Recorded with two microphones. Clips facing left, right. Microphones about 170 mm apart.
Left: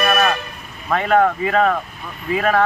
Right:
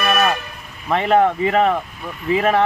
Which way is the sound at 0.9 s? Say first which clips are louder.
Right 1 dB; 25° right (ahead or behind).